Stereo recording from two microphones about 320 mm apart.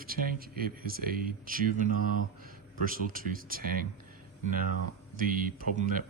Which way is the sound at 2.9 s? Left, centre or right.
Right.